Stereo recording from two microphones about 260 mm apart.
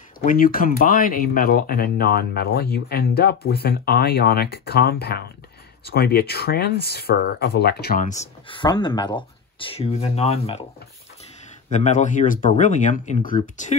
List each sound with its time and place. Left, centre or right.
0.2 s speech: left
11.7 s speech: left